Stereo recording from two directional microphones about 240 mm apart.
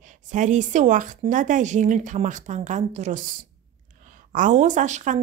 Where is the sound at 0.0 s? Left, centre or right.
Right.